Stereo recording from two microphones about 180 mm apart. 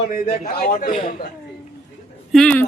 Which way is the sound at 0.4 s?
50° left (ahead or behind).